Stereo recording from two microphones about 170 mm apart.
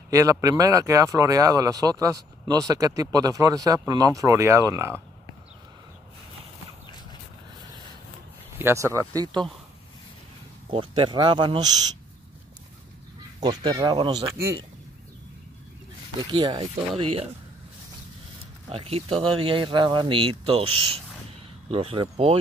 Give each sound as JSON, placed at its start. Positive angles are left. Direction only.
{"t": 0.1, "sound": "speech", "side_deg": -20}
{"t": 8.5, "sound": "speech", "side_deg": -15}
{"t": 10.7, "sound": "speech", "side_deg": -30}
{"t": 13.4, "sound": "speech", "side_deg": -25}
{"t": 16.2, "sound": "speech", "side_deg": -25}
{"t": 18.7, "sound": "speech", "side_deg": -35}